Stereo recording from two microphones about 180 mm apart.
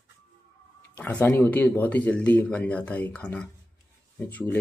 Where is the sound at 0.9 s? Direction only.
10° left (ahead or behind).